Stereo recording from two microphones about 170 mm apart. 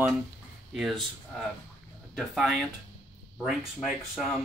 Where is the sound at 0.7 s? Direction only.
Centre (ahead or behind).